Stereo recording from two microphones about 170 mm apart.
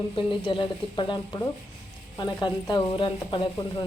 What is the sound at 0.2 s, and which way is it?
A woman's voice, 30° left (ahead or behind).